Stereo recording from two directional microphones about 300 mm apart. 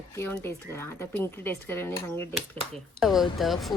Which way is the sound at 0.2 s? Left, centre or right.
Centre.